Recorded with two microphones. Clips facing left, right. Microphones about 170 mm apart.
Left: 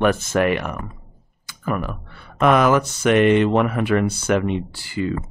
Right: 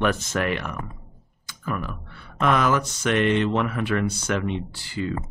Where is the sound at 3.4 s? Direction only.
55° left (ahead or behind).